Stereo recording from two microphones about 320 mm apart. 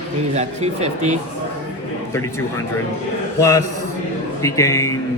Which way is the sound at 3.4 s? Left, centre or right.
Centre.